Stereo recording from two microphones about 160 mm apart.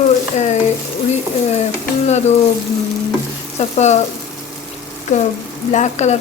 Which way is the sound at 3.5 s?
45° left (ahead or behind).